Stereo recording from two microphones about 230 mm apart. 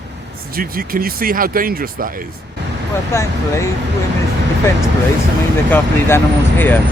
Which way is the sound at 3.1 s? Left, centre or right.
Centre.